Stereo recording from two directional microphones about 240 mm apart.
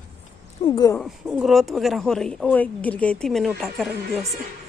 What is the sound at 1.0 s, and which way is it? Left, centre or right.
Speech, centre.